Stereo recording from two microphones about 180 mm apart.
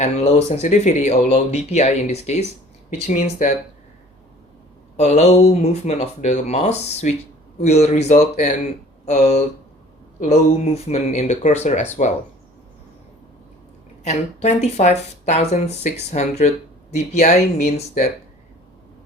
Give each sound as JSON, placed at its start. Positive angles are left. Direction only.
{"t": 0.0, "sound": "speech", "side_deg": 35}
{"t": 4.9, "sound": "speech", "side_deg": 40}
{"t": 10.8, "sound": "speech", "side_deg": 35}
{"t": 14.0, "sound": "speech", "side_deg": 40}